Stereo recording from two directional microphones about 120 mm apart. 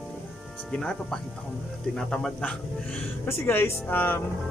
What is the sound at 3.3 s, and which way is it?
Speech, 20° left (ahead or behind).